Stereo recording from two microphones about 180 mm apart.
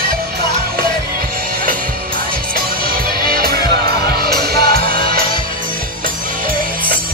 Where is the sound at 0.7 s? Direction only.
55° right (ahead or behind).